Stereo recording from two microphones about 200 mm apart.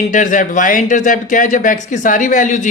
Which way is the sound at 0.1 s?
40° left (ahead or behind).